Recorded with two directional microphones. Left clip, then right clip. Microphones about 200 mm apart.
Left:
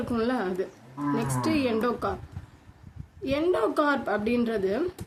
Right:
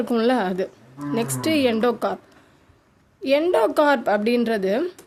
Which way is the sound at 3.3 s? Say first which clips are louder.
Right 7 dB; 45° right (ahead or behind).